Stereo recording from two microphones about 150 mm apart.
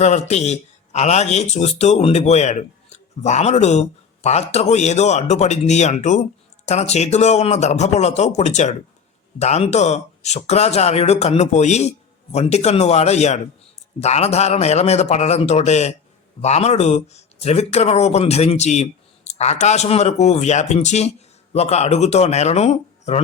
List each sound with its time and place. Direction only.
0.0 s a man's voice: 50° left (ahead or behind)